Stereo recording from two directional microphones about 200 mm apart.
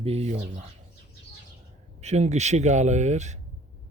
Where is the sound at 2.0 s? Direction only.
35° right (ahead or behind).